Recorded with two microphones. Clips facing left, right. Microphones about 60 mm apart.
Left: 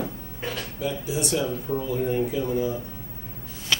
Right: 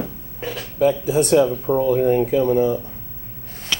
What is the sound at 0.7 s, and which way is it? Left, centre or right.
Speech, right.